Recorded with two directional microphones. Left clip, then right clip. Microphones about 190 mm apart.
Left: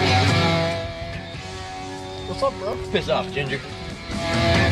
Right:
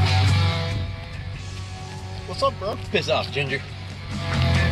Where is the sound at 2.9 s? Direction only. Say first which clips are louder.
Even; 10° right (ahead or behind).